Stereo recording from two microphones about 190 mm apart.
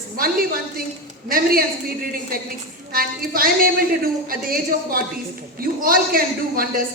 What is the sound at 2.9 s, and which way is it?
A woman's voice, 50° right (ahead or behind).